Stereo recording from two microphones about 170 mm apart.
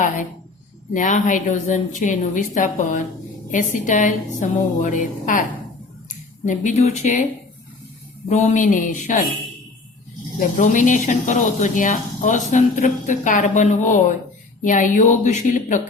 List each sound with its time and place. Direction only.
0.9 s speech: 50° left (ahead or behind)
8.3 s speech: 45° left (ahead or behind)
10.3 s speech: 50° left (ahead or behind)